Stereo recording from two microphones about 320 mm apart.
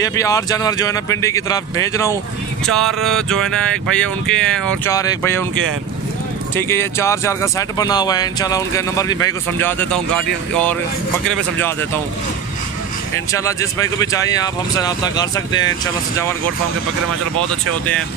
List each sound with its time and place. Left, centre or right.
0.0 s speech: centre
6.5 s speech: centre
13.1 s speech: centre